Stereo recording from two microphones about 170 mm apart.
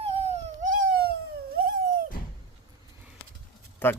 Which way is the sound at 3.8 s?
15° left (ahead or behind).